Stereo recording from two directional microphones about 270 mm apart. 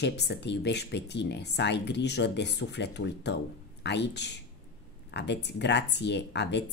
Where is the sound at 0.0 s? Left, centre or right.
Left.